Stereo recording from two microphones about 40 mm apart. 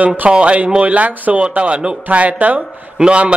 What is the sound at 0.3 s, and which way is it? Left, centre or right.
A man's voice, right.